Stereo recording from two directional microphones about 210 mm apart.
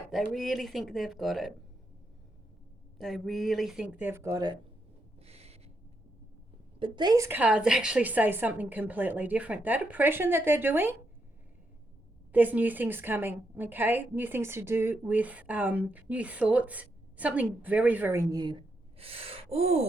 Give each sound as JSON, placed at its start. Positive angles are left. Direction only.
{"t": 0.1, "sound": "speech", "side_deg": 0}
{"t": 3.0, "sound": "speech", "side_deg": 0}
{"t": 5.2, "sound": "a sound", "side_deg": -30}
{"t": 6.7, "sound": "a woman's voice", "side_deg": -25}
{"t": 12.3, "sound": "a woman's voice", "side_deg": -10}